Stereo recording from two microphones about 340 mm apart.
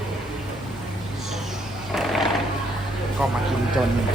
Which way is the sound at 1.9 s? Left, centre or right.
Centre.